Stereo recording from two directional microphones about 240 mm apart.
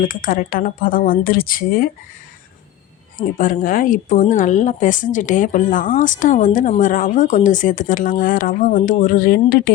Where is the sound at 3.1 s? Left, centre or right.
Left.